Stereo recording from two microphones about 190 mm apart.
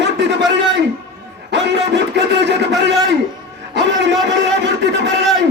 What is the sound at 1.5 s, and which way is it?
A man's voice, 70° right (ahead or behind).